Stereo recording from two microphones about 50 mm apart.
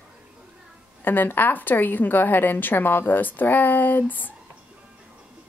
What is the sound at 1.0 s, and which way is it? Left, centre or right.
Speech, left.